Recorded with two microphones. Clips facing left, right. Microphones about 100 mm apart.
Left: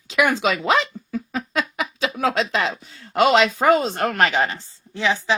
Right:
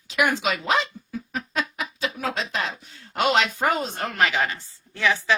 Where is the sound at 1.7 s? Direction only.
90° left.